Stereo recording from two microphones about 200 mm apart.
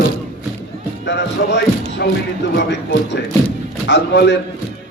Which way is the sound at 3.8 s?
60° left (ahead or behind).